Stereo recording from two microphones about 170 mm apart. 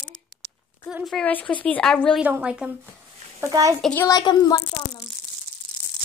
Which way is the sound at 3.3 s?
20° right (ahead or behind).